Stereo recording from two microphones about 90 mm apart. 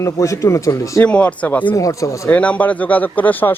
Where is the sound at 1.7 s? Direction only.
35° left (ahead or behind).